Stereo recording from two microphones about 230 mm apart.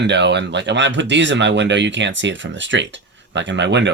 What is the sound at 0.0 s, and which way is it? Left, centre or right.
Speech, right.